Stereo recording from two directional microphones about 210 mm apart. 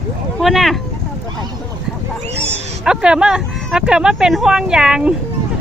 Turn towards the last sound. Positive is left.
turn(degrees=-5)  # may be behind; listen again after turning